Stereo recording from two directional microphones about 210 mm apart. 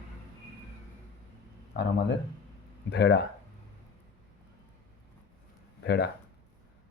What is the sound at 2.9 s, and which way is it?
Speech, 55° left (ahead or behind).